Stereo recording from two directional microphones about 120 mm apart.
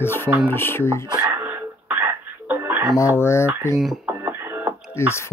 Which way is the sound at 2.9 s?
25° left (ahead or behind).